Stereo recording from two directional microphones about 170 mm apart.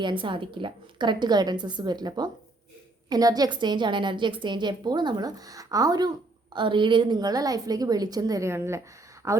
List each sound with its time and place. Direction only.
0.0 s a woman's voice: 30° right (ahead or behind)